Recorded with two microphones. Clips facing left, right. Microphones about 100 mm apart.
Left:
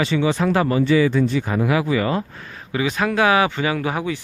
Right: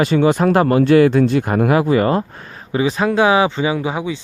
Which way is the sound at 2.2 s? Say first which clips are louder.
Right 3 dB; 30° right (ahead or behind).